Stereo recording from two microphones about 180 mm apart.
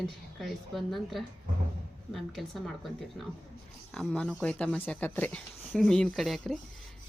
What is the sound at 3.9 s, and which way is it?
A woman's voice, 5° left (ahead or behind).